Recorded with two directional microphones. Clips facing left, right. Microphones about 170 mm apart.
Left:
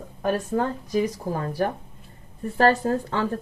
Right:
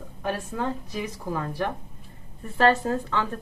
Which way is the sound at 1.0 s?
35° left (ahead or behind).